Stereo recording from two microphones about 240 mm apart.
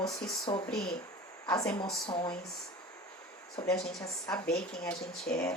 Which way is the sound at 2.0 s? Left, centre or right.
Left.